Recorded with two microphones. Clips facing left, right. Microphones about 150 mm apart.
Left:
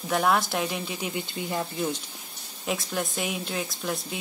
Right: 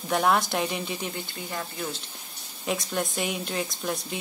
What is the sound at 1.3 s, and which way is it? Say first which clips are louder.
Speech: left 4 dB; 20° left (ahead or behind).